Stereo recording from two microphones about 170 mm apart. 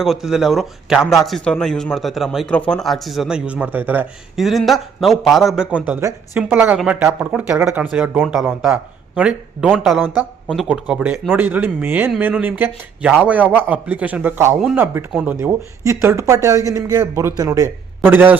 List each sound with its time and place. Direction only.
0.0 s speech: centre (ahead or behind)
5.9 s speech: 15° right (ahead or behind)